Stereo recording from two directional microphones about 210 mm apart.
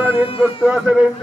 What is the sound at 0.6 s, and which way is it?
Speech, 5° right (ahead or behind).